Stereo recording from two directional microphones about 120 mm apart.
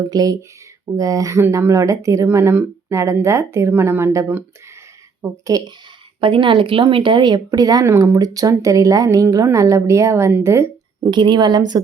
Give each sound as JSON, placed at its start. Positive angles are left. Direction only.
{"t": 0.1, "sound": "a woman's voice", "side_deg": -30}
{"t": 5.5, "sound": "speech", "side_deg": -30}
{"t": 6.1, "sound": "speech", "side_deg": -45}
{"t": 11.1, "sound": "a woman's voice", "side_deg": -40}